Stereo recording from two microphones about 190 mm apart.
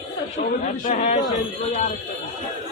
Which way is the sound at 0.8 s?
35° left (ahead or behind).